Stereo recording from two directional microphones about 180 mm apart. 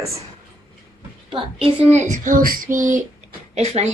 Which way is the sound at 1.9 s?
40° right (ahead or behind).